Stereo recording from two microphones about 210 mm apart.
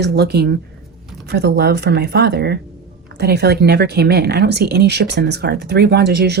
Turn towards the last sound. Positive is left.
turn(degrees=-50)  # may be behind; listen again after turning